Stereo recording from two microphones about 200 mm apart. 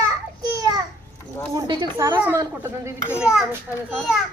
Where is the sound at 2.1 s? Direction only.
10° right (ahead or behind).